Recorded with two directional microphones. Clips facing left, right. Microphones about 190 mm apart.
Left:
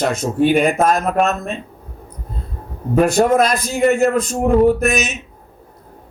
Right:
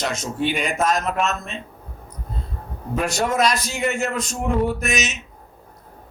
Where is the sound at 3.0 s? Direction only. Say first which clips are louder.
Left 8 dB; 55° left (ahead or behind).